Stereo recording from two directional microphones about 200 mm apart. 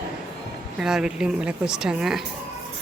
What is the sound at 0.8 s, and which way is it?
Speech, centre (ahead or behind).